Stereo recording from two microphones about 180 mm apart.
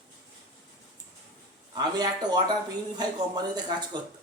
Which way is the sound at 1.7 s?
25° right (ahead or behind).